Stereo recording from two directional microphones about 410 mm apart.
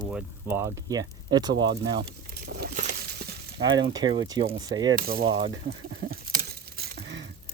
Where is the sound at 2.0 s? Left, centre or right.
Right.